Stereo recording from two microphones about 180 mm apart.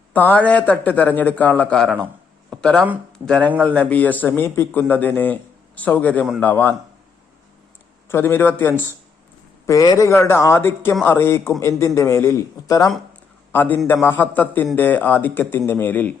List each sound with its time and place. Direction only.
0.1 s speech: 10° left (ahead or behind)
2.5 s a sound: 5° left (ahead or behind)
3.2 s speech: 10° left (ahead or behind)
8.0 s speech: 15° left (ahead or behind)